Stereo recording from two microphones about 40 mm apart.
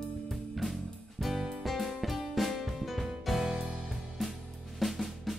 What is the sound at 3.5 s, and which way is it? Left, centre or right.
Music, right.